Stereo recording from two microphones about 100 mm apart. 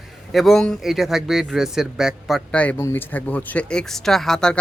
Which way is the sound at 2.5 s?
15° left (ahead or behind).